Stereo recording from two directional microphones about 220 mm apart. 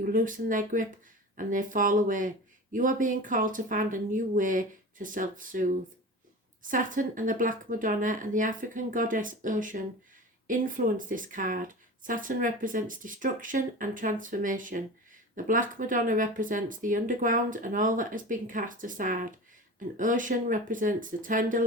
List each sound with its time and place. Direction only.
0.0 s speech: 35° right (ahead or behind)